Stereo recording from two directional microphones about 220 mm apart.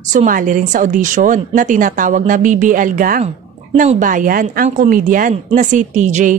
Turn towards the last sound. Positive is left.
turn(degrees=-35)  # may be behind; listen again after turning